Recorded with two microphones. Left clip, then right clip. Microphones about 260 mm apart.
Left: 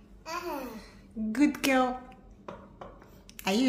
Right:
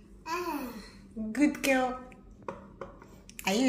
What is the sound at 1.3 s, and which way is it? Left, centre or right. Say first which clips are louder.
Speech: left 1 dB; centre.